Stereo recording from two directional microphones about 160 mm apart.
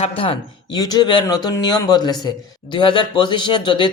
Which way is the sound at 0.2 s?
30° left (ahead or behind).